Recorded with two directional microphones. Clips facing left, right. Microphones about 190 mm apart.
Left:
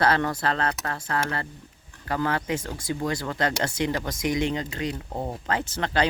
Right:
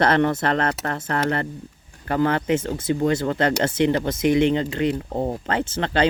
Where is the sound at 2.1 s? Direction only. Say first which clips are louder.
Right 6 dB; 25° right (ahead or behind).